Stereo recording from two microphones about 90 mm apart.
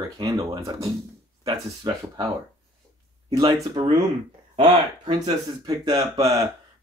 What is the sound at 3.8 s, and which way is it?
Speech, 60° right (ahead or behind).